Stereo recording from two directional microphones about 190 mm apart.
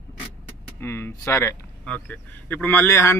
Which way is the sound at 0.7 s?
15° left (ahead or behind).